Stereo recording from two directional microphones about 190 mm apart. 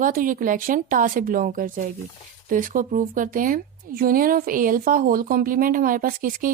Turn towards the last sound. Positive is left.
turn(degrees=-45)  # may be behind; listen again after turning